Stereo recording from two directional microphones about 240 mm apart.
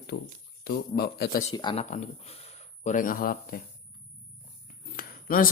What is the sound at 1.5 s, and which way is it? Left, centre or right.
Speech, left.